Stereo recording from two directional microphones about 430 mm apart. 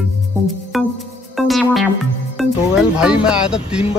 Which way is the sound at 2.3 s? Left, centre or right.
Centre.